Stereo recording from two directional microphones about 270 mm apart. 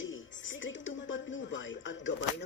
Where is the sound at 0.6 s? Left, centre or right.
Left.